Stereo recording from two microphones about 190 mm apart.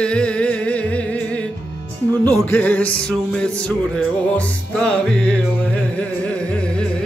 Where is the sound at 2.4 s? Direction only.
10° left (ahead or behind).